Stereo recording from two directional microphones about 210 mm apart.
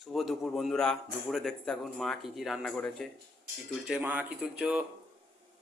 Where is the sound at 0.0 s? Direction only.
Centre (ahead or behind).